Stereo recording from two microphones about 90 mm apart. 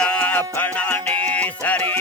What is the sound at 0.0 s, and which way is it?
Music, 15° left (ahead or behind).